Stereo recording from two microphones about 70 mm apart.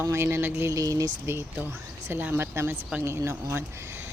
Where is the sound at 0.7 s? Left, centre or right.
Right.